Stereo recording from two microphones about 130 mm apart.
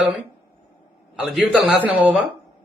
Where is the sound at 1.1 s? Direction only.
5° right (ahead or behind).